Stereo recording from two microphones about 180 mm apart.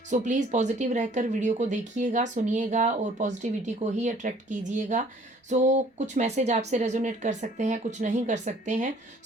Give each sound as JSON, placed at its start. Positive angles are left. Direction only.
{"t": 0.1, "sound": "speech", "side_deg": -40}